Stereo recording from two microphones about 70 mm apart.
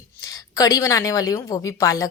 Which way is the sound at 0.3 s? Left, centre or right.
Left.